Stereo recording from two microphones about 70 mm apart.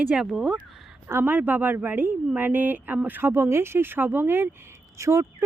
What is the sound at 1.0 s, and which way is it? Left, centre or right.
A woman's voice, right.